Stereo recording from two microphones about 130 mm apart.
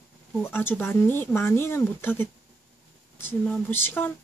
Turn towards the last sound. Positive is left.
turn(degrees=15)  # may be behind; listen again after turning